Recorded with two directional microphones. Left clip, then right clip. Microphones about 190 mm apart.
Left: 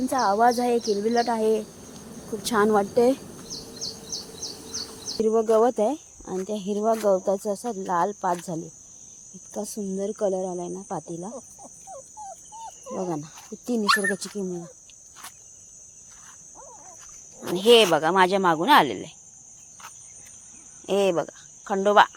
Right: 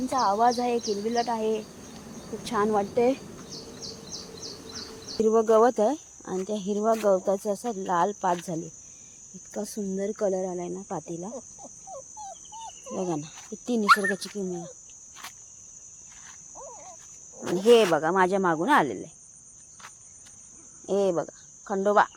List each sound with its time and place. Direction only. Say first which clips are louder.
0.1 s speech: left 2 dB; 20° left (ahead or behind)
5.1 s speech: even; 5° right (ahead or behind)
12.9 s speech: left 1 dB; centre (ahead or behind)
17.6 s speech: left 2 dB; 5° right (ahead or behind)
20.8 s speech: left 3 dB; 5° right (ahead or behind)